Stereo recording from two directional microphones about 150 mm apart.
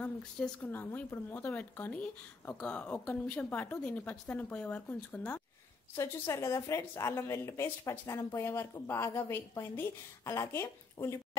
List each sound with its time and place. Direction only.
0.0 s a woman's voice: 10° left (ahead or behind)